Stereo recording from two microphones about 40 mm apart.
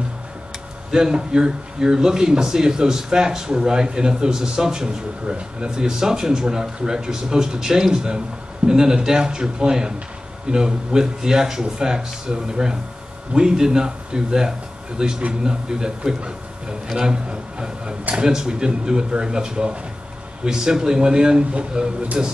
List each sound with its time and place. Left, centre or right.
1.1 s speech: centre